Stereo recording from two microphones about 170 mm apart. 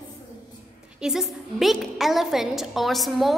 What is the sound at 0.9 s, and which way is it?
A woman's voice, 5° right (ahead or behind).